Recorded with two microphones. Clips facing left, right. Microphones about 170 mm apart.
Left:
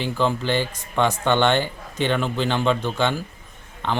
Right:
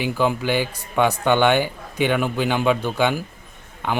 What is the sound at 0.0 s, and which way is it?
A man's voice, 10° right (ahead or behind).